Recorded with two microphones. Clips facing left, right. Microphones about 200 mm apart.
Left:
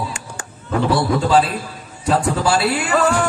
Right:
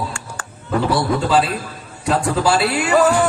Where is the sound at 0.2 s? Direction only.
20° left (ahead or behind).